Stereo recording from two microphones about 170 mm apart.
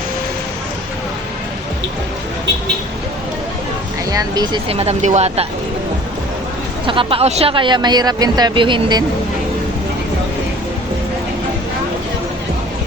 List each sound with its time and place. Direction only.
4.1 s speech: 20° right (ahead or behind)
4.7 s speech: 35° right (ahead or behind)
6.8 s speech: 30° right (ahead or behind)